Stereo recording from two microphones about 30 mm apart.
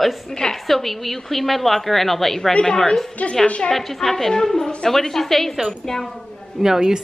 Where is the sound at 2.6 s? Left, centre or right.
Left.